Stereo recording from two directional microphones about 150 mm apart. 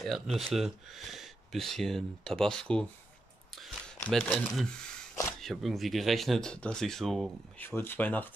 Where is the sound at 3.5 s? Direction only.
5° left (ahead or behind).